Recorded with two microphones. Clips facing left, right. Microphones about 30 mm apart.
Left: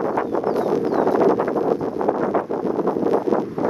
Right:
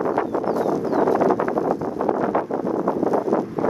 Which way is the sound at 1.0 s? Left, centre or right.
Centre.